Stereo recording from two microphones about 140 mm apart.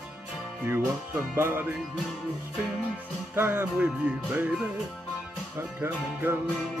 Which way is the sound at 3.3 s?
15° right (ahead or behind).